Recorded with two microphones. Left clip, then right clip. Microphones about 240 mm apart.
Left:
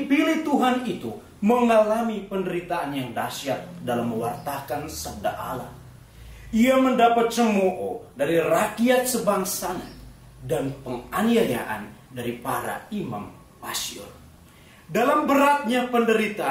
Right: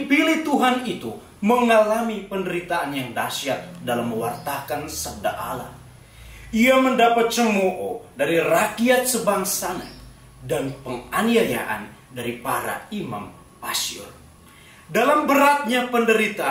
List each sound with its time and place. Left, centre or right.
0.1 s a sound: centre
1.4 s speech: centre
9.6 s speech: centre
15.0 s speech: centre